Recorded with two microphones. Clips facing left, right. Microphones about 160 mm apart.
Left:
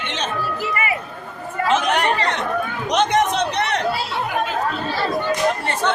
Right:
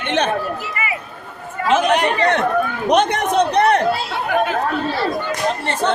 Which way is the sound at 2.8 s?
55° right (ahead or behind).